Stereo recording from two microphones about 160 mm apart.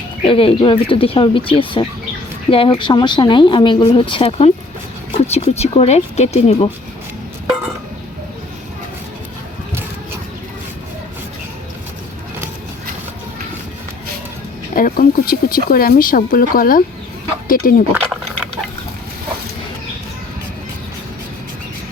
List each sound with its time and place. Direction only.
0.3 s speech: 35° left (ahead or behind)
14.7 s speech: 60° left (ahead or behind)
17.9 s speech: 10° right (ahead or behind)